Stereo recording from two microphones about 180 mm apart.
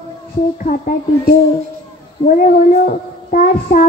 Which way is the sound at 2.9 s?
50° left (ahead or behind).